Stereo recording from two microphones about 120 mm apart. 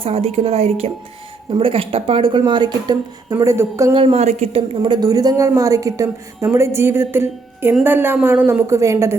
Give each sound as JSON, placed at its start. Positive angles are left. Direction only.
{"t": 0.0, "sound": "speech", "side_deg": -55}
{"t": 2.4, "sound": "speech", "side_deg": -35}
{"t": 3.3, "sound": "a woman's voice", "side_deg": -20}
{"t": 3.9, "sound": "speech", "side_deg": -50}
{"t": 4.2, "sound": "a woman's voice", "side_deg": -65}
{"t": 4.7, "sound": "a woman's voice", "side_deg": -40}